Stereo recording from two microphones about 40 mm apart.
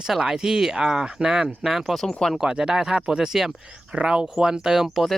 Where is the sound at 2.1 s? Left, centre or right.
Centre.